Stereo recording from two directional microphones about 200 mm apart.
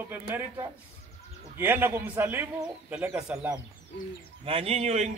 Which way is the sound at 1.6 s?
10° right (ahead or behind).